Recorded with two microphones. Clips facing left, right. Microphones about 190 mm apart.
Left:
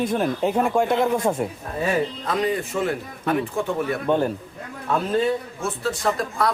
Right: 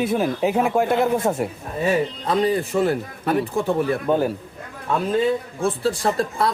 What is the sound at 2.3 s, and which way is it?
A man's voice, 35° right (ahead or behind).